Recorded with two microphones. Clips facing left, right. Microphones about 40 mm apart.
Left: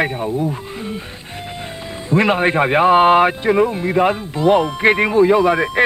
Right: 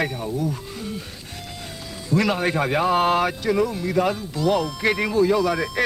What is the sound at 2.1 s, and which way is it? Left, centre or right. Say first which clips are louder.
Speech: left 6 dB; left.